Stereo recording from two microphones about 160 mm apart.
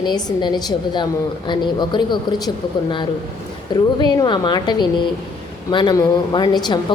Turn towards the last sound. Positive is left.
turn(degrees=25)  # may be behind; listen again after turning